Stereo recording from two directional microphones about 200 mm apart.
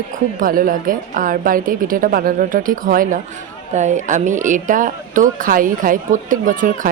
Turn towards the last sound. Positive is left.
turn(degrees=-40)  # may be behind; listen again after turning